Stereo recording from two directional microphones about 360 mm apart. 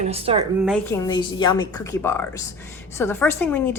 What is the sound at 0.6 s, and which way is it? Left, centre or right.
A woman's voice, centre.